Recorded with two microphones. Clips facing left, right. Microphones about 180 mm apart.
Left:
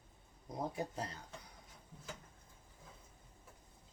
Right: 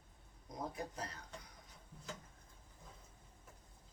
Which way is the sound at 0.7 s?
25° left (ahead or behind).